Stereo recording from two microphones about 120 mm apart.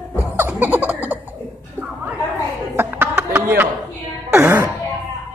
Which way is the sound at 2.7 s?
20° right (ahead or behind).